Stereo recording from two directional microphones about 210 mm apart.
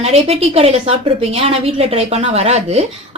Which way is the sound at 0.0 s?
30° right (ahead or behind).